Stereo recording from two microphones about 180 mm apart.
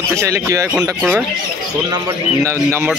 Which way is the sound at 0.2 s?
15° right (ahead or behind).